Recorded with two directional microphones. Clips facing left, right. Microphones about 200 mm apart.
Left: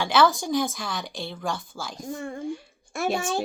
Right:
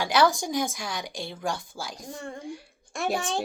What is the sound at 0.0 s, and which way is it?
Speech, 45° right (ahead or behind).